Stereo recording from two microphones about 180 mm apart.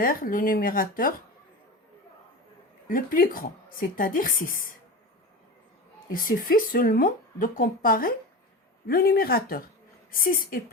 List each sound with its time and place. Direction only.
0.0 s a woman's voice: 50° left (ahead or behind)
2.8 s a woman's voice: 50° left (ahead or behind)
6.1 s a woman's voice: 50° left (ahead or behind)